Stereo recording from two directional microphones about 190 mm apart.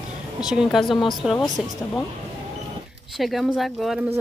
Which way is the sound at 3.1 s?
Centre (ahead or behind).